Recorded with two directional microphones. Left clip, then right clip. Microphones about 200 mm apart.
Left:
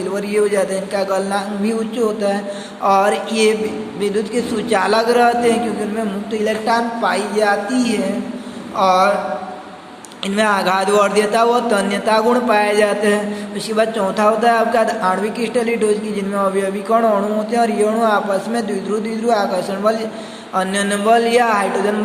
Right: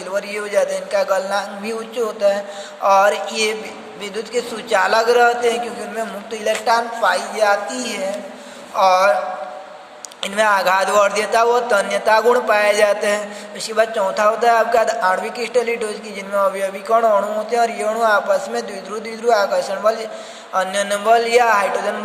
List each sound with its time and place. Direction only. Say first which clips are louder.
0.1 s a man's voice: left 2 dB; 20° right (ahead or behind)
10.2 s a woman's voice: right 1 dB; 25° right (ahead or behind)